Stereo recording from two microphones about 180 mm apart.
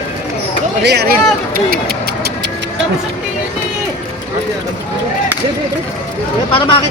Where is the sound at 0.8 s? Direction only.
65° right (ahead or behind).